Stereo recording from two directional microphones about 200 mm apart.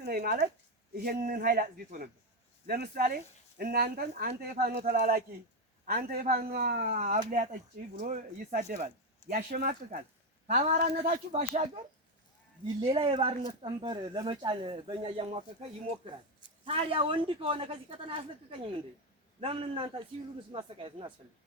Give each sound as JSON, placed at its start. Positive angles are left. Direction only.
{"t": 0.0, "sound": "speech", "side_deg": -50}
{"t": 10.4, "sound": "speech", "side_deg": -35}
{"t": 12.9, "sound": "speech", "side_deg": -25}
{"t": 16.6, "sound": "speech", "side_deg": -30}